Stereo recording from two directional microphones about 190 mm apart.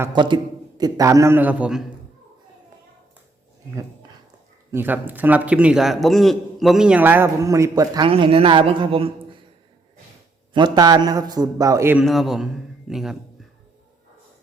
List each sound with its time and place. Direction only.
0.1 s a man's voice: 25° right (ahead or behind); by 1.8 s 5° right (ahead or behind)
4.7 s a man's voice: 10° right (ahead or behind); by 9.4 s 30° right (ahead or behind)
10.5 s a man's voice: 20° right (ahead or behind)
12.0 s a man's voice: centre (ahead or behind)